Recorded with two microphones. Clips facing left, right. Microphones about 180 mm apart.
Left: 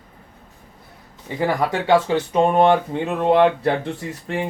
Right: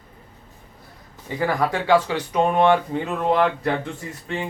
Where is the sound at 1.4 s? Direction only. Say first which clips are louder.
Left 2 dB; 20° left (ahead or behind).